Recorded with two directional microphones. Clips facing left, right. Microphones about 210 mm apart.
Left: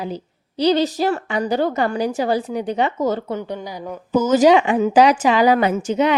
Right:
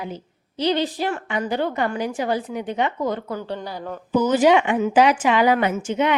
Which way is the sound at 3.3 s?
20° left (ahead or behind).